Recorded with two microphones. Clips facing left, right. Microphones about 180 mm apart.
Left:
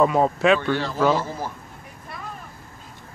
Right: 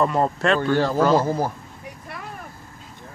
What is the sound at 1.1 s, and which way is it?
Speech, 40° right (ahead or behind).